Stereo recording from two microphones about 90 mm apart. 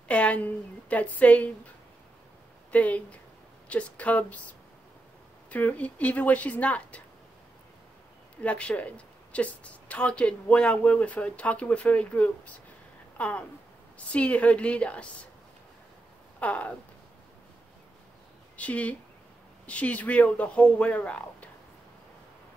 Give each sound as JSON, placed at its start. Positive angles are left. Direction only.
{"t": 0.1, "sound": "a woman's voice", "side_deg": 15}
{"t": 2.7, "sound": "a woman's voice", "side_deg": 15}
{"t": 5.5, "sound": "a woman's voice", "side_deg": 20}
{"t": 8.4, "sound": "a woman's voice", "side_deg": 15}
{"t": 16.3, "sound": "a sound", "side_deg": 15}
{"t": 18.6, "sound": "a woman's voice", "side_deg": 15}